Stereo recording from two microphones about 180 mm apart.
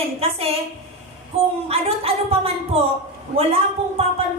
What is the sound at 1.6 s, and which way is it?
Speech, 35° right (ahead or behind).